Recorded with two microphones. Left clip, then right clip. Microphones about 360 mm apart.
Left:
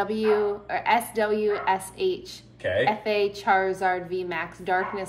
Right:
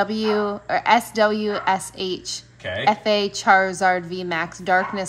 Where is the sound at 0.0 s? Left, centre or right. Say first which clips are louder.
Right 2 dB; centre.